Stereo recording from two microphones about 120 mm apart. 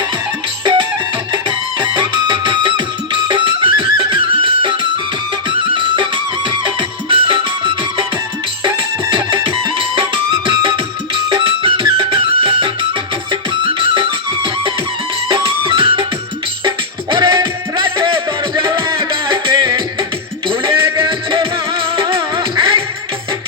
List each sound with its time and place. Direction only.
1.3 s music: 40° right (ahead or behind)
20.8 s music: 20° right (ahead or behind)
21.1 s music: 45° right (ahead or behind)